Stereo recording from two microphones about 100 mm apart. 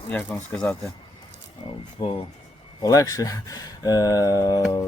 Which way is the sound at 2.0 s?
40° left (ahead or behind).